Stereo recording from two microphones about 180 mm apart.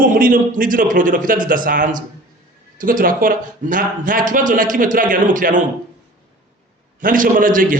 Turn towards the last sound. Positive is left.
turn(degrees=-50)  # may be behind; listen again after turning